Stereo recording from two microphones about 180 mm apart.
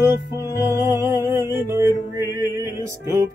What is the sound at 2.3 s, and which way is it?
Music, 20° right (ahead or behind).